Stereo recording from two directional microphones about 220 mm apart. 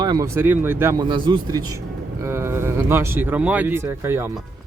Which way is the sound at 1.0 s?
20° right (ahead or behind).